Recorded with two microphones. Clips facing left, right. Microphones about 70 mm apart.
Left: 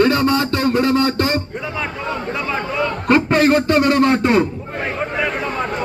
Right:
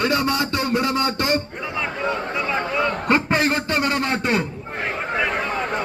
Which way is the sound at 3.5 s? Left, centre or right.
Centre.